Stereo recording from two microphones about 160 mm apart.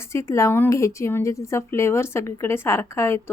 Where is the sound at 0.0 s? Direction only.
15° left (ahead or behind).